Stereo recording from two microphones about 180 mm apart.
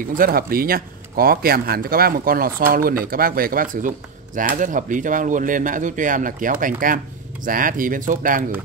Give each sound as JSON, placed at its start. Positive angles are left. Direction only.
{"t": 0.1, "sound": "speech", "side_deg": -55}